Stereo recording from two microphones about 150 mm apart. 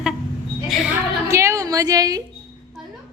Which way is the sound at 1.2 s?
20° right (ahead or behind).